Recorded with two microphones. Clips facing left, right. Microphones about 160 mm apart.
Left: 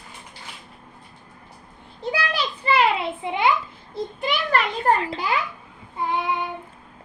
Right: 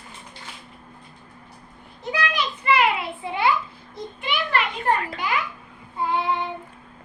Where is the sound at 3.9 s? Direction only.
40° left (ahead or behind).